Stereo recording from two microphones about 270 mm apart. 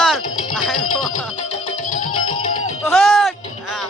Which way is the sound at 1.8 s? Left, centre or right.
Left.